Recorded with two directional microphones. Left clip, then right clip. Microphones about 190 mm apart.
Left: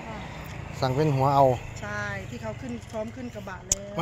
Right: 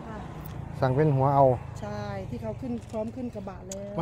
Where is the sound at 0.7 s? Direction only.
15° right (ahead or behind).